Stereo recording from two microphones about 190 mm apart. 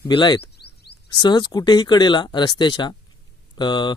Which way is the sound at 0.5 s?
60° left (ahead or behind).